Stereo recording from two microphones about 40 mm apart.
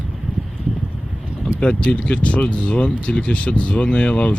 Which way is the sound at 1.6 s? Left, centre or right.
Left.